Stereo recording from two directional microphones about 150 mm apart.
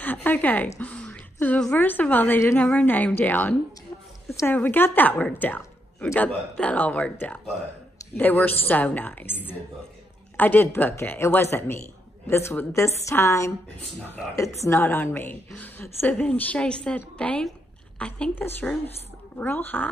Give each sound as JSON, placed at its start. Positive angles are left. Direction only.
{"t": 0.0, "sound": "a woman's voice", "side_deg": 10}